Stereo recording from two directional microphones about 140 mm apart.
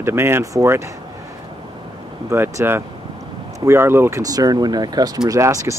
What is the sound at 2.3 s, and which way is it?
Speech, 20° right (ahead or behind).